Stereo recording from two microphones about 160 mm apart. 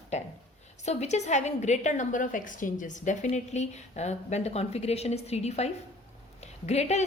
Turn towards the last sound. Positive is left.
turn(degrees=45)  # may be behind; listen again after turning